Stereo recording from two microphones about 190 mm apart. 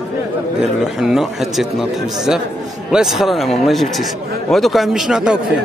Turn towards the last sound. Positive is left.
turn(degrees=-5)  # may be behind; listen again after turning